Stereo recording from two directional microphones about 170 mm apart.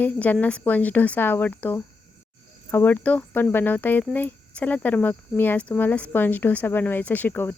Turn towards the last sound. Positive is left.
turn(degrees=10)  # may be behind; listen again after turning